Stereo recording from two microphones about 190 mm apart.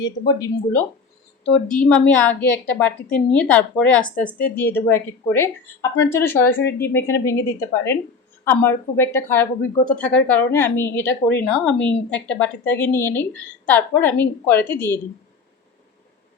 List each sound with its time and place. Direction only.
0.0 s speech: 20° left (ahead or behind)
1.7 s speech: 5° left (ahead or behind)